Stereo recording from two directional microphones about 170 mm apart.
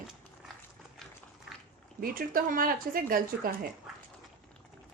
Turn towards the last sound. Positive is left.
turn(degrees=-60)  # may be behind; listen again after turning